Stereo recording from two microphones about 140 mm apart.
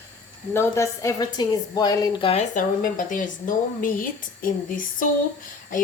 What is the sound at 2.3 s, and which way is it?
Speech, 55° left (ahead or behind).